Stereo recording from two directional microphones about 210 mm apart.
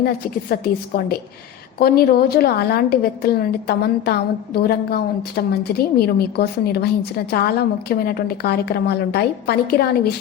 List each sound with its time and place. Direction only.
0.5 s a woman's voice: 45° left (ahead or behind)